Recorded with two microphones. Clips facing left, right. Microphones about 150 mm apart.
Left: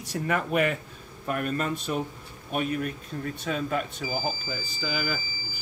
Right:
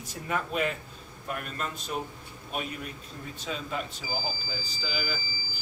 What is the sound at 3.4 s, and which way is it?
Speech, 55° left (ahead or behind).